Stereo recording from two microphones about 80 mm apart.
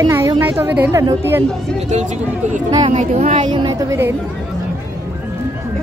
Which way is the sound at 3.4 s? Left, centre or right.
Right.